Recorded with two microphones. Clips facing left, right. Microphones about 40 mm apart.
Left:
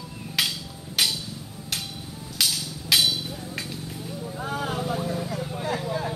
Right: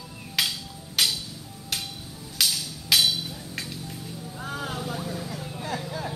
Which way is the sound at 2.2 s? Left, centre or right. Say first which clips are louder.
Even; centre.